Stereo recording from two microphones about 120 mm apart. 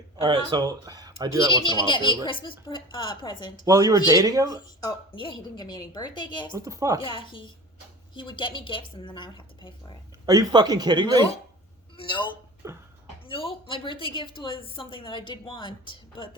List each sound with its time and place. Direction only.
0.5 s speech: 30° right (ahead or behind)
1.5 s speech: 40° left (ahead or behind)
3.7 s speech: 30° right (ahead or behind)
4.8 s speech: 40° left (ahead or behind)
6.6 s speech: 25° right (ahead or behind)
7.0 s a woman's voice: 45° left (ahead or behind)
10.2 s speech: 35° right (ahead or behind)
11.9 s a woman's voice: 40° left (ahead or behind)
12.6 s speech: 25° right (ahead or behind)
13.2 s a woman's voice: 50° left (ahead or behind)